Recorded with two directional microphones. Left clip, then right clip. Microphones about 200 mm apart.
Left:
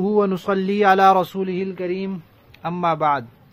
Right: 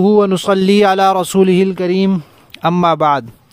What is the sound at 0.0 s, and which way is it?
Speech, 40° right (ahead or behind).